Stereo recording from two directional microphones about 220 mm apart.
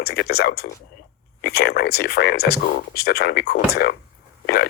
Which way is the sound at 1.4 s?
45° left (ahead or behind).